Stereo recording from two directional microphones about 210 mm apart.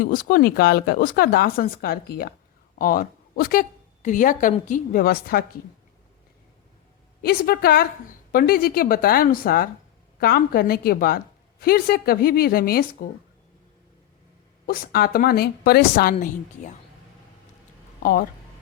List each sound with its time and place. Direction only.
0.0 s a woman's voice: 40° left (ahead or behind)
7.2 s speech: 45° left (ahead or behind)
14.7 s speech: 45° left (ahead or behind)
18.0 s speech: 45° left (ahead or behind)